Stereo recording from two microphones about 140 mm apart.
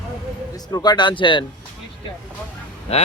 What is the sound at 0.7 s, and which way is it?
Speech, 30° left (ahead or behind).